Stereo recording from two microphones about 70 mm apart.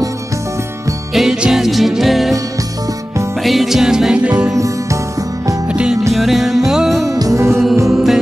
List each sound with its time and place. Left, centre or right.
1.1 s music: centre
3.4 s music: centre
5.7 s music: centre
6.1 s music: centre
7.1 s music: right
7.9 s music: centre